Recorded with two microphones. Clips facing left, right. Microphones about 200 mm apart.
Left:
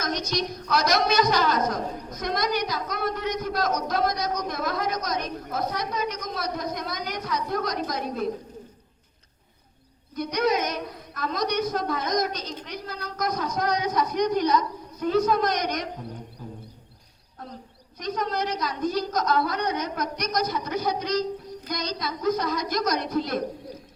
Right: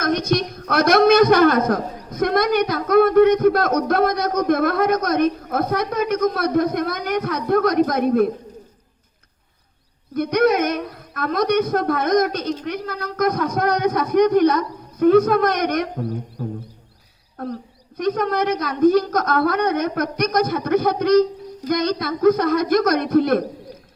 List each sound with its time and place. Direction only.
0.0 s a woman's voice: 55° right (ahead or behind)
10.2 s a man's voice: 55° right (ahead or behind)